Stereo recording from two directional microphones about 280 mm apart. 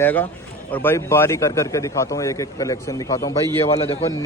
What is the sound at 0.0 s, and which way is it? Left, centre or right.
A man's voice, centre.